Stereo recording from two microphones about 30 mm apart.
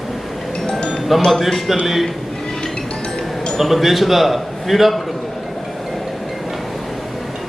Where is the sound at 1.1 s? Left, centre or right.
Centre.